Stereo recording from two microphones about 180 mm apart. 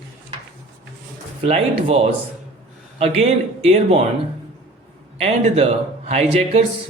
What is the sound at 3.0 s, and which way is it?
Speech, 35° right (ahead or behind).